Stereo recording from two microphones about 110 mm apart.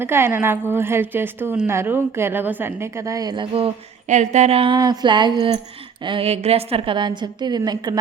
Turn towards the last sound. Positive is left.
turn(degrees=-40)  # may be behind; listen again after turning